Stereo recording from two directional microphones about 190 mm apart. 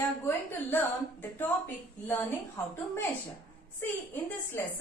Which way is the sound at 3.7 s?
10° left (ahead or behind).